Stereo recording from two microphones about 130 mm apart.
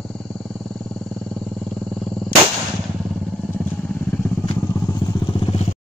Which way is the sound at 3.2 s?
5° left (ahead or behind).